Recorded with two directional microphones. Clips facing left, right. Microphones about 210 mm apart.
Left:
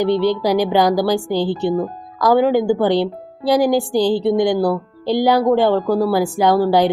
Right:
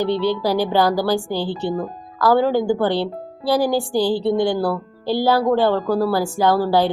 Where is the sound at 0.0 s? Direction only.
15° left (ahead or behind).